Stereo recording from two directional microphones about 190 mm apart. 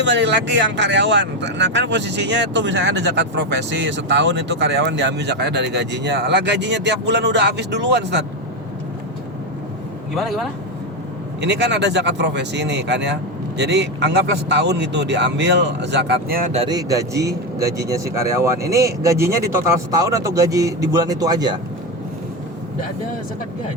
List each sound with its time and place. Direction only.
0.0 s speech: 70° right (ahead or behind)
10.2 s speech: centre (ahead or behind)
11.3 s speech: 65° right (ahead or behind)
16.6 s a man's voice: 20° right (ahead or behind)